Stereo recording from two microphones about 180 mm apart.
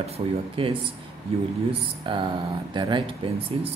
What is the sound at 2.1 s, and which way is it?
Speech, 30° right (ahead or behind).